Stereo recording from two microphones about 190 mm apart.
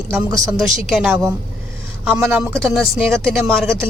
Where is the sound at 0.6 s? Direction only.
Centre (ahead or behind).